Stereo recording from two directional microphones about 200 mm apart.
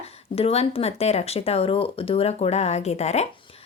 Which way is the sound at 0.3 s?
30° left (ahead or behind).